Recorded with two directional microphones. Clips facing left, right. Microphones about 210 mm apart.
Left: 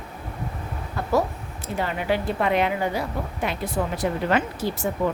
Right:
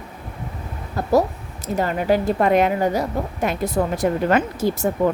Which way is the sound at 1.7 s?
45° right (ahead or behind).